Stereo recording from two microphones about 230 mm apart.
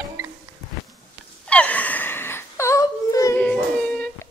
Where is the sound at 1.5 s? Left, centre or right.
Centre.